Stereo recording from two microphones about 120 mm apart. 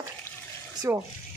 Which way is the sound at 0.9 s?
20° right (ahead or behind).